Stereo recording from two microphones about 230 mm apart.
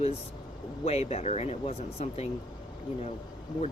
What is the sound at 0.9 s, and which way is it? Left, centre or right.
Speech, left.